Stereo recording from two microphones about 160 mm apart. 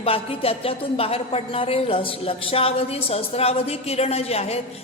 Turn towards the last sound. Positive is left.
turn(degrees=40)  # may be behind; listen again after turning